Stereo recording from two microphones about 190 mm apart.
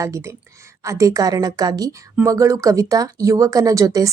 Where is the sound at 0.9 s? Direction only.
15° right (ahead or behind).